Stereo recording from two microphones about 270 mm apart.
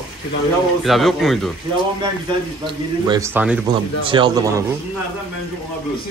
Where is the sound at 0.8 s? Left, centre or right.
Centre.